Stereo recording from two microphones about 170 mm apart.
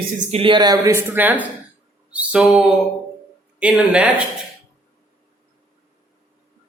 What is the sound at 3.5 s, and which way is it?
Speech, 5° right (ahead or behind).